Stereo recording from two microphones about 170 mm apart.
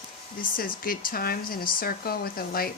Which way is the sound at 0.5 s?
55° left (ahead or behind).